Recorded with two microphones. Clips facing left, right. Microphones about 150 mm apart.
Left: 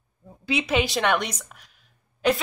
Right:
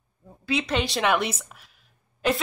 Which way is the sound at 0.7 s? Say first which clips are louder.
Left 1 dB; centre (ahead or behind).